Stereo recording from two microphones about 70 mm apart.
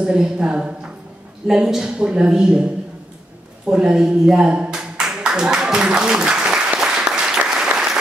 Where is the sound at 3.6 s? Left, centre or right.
Centre.